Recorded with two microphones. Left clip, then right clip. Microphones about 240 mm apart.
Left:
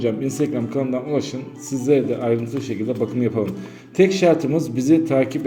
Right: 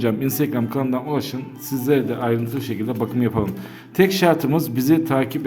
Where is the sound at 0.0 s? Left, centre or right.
Right.